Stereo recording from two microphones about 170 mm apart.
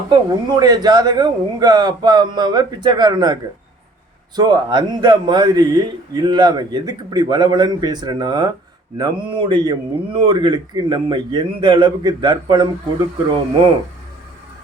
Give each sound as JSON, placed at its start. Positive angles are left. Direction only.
{"t": 0.1, "sound": "a man's voice", "side_deg": -25}
{"t": 4.4, "sound": "a man's voice", "side_deg": -25}